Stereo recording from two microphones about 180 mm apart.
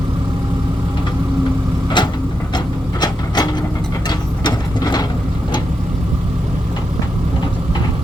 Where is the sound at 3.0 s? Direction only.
20° left (ahead or behind).